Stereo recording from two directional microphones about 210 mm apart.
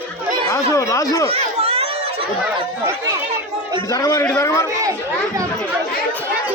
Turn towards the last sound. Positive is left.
turn(degrees=15)  # may be behind; listen again after turning